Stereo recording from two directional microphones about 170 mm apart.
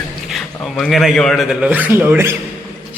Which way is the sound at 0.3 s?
Centre (ahead or behind).